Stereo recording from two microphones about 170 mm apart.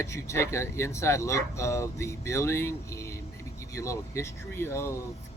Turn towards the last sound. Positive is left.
turn(degrees=15)  # may be behind; listen again after turning